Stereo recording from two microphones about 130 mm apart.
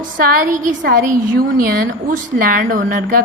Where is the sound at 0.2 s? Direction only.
90° right.